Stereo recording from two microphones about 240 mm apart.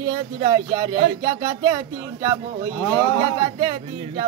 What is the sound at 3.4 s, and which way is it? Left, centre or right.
Speech, right.